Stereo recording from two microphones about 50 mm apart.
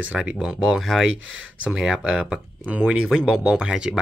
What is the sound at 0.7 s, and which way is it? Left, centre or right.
Speech, centre.